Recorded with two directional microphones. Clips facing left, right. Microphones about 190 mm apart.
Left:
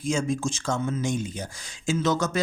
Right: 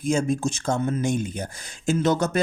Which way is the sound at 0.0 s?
55° right (ahead or behind).